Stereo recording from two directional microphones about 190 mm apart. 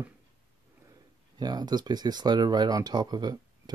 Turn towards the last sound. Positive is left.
turn(degrees=-20)  # may be behind; listen again after turning